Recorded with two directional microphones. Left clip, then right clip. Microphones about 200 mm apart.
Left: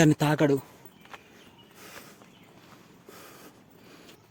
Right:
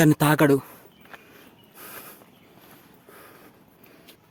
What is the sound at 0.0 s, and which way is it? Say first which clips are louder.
Speech: right 4 dB; 20° right (ahead or behind).